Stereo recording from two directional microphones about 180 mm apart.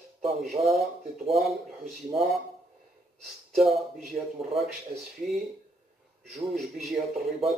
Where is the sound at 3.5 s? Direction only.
Centre (ahead or behind).